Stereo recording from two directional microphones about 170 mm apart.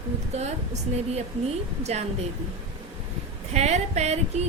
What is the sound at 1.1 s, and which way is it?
Speech, 40° right (ahead or behind).